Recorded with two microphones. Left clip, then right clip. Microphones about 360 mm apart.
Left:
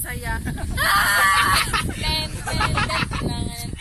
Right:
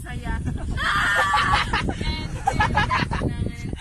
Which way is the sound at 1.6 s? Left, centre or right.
Right.